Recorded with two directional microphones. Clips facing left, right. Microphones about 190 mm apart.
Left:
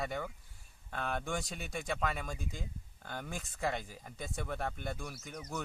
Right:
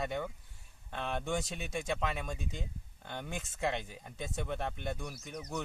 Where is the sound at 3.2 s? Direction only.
20° right (ahead or behind).